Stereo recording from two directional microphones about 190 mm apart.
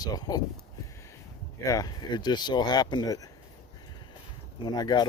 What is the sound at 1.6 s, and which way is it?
Speech, 20° left (ahead or behind).